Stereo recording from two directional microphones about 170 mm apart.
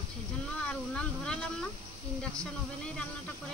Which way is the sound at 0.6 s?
5° left (ahead or behind).